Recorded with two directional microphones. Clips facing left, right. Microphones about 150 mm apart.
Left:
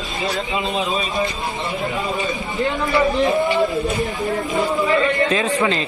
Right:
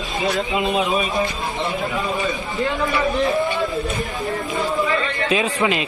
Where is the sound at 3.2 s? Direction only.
20° left (ahead or behind).